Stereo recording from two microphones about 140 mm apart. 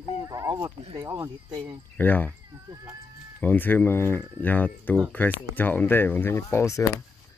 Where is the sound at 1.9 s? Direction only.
10° left (ahead or behind).